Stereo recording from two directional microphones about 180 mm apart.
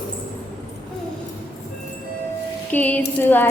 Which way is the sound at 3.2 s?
10° left (ahead or behind).